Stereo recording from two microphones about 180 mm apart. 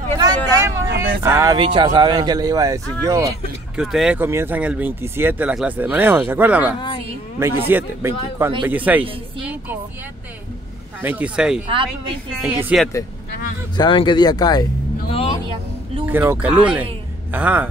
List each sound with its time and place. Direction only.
0.2 s vehicle: 15° right (ahead or behind)
1.2 s speech: 15° right (ahead or behind)
1.6 s speech: 25° right (ahead or behind)
3.7 s speech: 5° right (ahead or behind)
11.0 s speech: 10° right (ahead or behind)
13.7 s speech: 25° left (ahead or behind)
16.1 s speech: 10° right (ahead or behind)